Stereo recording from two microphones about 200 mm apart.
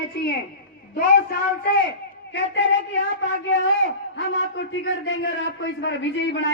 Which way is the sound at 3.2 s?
65° left (ahead or behind).